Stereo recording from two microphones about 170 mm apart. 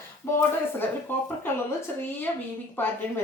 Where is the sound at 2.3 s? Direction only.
15° left (ahead or behind).